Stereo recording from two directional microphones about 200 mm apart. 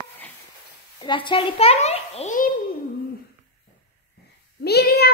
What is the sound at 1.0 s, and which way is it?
A child's voice, 25° left (ahead or behind).